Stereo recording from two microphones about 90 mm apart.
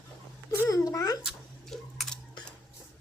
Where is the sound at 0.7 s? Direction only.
40° left (ahead or behind).